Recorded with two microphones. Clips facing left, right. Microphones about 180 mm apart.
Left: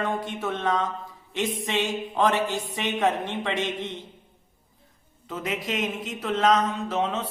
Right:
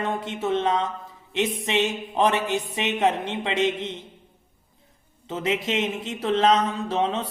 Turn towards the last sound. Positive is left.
turn(degrees=-30)  # may be behind; listen again after turning